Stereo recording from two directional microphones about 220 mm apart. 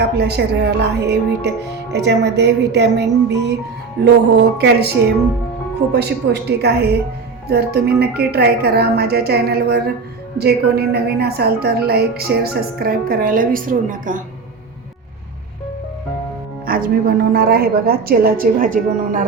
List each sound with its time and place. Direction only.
0.0 s a woman's voice: 50° right (ahead or behind)
16.6 s a woman's voice: 40° right (ahead or behind)